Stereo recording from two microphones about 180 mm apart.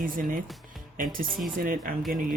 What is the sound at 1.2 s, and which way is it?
Speech, centre (ahead or behind).